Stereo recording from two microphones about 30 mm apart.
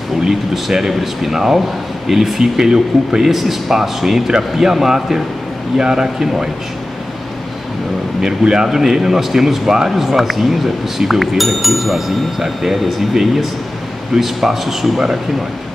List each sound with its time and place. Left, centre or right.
0.3 s a man's voice: centre
8.2 s a man's voice: right
9.9 s a man's voice: centre